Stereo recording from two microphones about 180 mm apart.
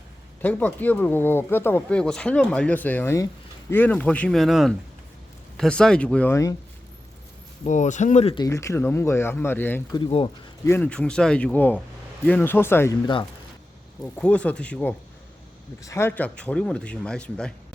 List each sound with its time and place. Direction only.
0.4 s speech: 10° left (ahead or behind)
7.6 s speech: 40° left (ahead or behind)
8.4 s speech: 15° left (ahead or behind)
9.9 s speech: 30° left (ahead or behind)
10.7 s speech: 10° left (ahead or behind)
14.0 s speech: 5° left (ahead or behind)